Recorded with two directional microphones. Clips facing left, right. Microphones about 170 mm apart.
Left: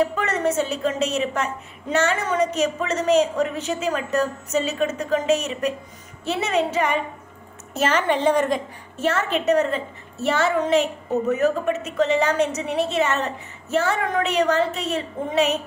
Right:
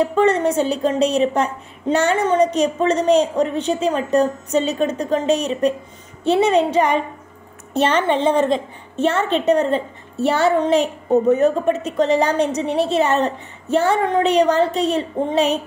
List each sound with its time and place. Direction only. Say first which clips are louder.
0.0 s a woman's voice: right 6 dB; 30° right (ahead or behind)